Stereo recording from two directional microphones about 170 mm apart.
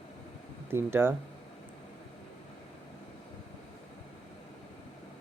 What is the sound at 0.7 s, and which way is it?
Speech, 15° right (ahead or behind).